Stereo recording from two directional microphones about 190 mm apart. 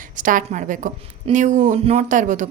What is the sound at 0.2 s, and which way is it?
A woman's voice, 45° right (ahead or behind).